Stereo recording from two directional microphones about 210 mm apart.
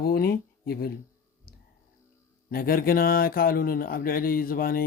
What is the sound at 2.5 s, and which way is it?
Speech, 45° left (ahead or behind).